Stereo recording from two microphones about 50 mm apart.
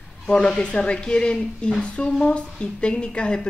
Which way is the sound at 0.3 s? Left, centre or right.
Centre.